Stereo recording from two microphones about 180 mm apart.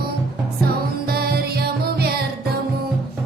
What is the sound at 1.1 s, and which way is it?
Music, 60° right (ahead or behind).